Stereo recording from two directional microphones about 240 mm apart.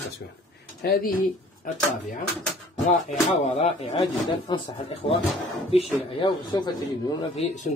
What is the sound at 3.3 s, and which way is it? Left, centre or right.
Speech, left.